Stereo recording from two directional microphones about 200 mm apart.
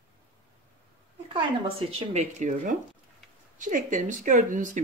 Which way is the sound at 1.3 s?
30° right (ahead or behind).